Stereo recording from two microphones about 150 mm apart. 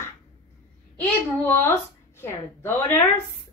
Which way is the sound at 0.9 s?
15° left (ahead or behind).